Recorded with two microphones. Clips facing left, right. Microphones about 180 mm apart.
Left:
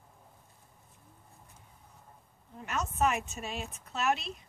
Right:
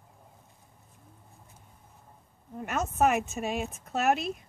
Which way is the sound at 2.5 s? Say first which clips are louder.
Right 5 dB; 50° right (ahead or behind).